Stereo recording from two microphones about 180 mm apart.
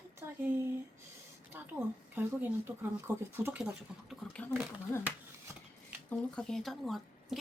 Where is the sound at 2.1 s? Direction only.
10° right (ahead or behind).